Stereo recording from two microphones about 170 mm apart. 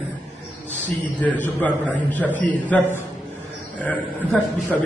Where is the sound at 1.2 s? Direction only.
10° left (ahead or behind).